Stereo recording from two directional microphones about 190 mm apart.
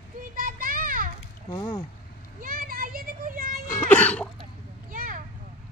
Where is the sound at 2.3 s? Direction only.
45° right (ahead or behind).